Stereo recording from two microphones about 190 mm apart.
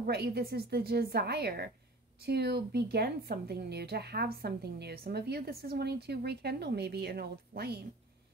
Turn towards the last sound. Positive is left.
turn(degrees=-55)  # may be behind; listen again after turning